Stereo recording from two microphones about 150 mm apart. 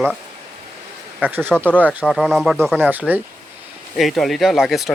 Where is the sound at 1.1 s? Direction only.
10° right (ahead or behind).